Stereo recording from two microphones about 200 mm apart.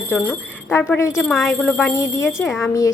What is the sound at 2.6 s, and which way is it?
Speech, 15° left (ahead or behind).